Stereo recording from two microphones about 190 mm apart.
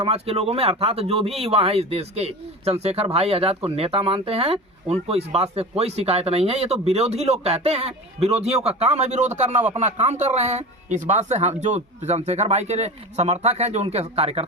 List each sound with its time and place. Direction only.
0.0 s speech: 30° right (ahead or behind)